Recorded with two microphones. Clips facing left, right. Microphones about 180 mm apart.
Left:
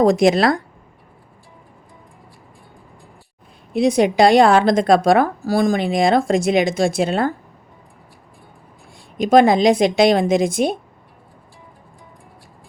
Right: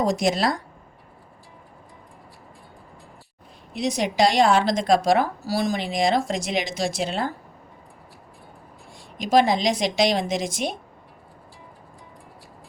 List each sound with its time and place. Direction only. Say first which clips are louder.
0.0 s a woman's voice: left 8 dB; 60° left (ahead or behind)
3.7 s a woman's voice: left 9 dB; 55° left (ahead or behind)
9.2 s a woman's voice: left 7 dB; 55° left (ahead or behind)